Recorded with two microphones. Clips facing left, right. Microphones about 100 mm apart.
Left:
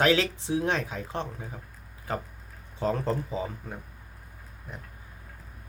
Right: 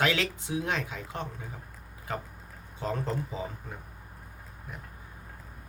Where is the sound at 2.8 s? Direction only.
35° left (ahead or behind).